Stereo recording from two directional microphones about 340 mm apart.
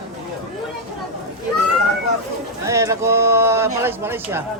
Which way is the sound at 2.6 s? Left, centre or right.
Centre.